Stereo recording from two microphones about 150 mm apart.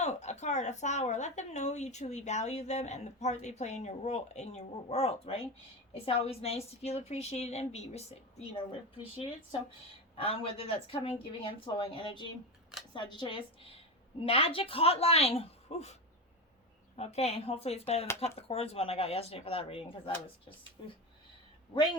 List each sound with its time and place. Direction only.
0.0 s speech: 50° left (ahead or behind)
10.2 s speech: 40° left (ahead or behind)
17.0 s speech: 45° left (ahead or behind)